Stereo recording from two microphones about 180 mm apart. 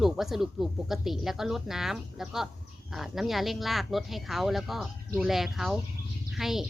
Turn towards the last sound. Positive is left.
turn(degrees=0)  # may be behind; listen again after turning